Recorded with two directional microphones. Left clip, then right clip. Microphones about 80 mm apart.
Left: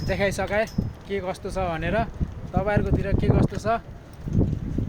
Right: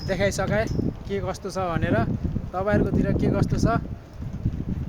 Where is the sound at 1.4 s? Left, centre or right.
Right.